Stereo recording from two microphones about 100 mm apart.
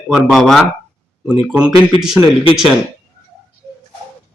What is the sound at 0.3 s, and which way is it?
Speech, centre (ahead or behind).